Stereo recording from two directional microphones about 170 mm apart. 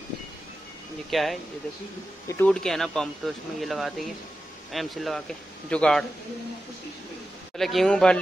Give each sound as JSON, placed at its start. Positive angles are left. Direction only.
{"t": 1.1, "sound": "speech", "side_deg": 0}
{"t": 2.2, "sound": "speech", "side_deg": 10}
{"t": 7.5, "sound": "speech", "side_deg": 0}